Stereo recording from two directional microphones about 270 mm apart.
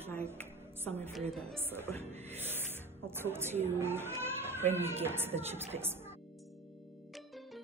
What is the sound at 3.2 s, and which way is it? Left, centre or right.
Speech, centre.